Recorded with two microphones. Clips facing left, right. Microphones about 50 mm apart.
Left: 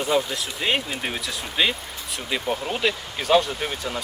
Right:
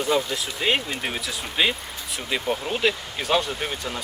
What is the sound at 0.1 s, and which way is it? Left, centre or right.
Speech, centre.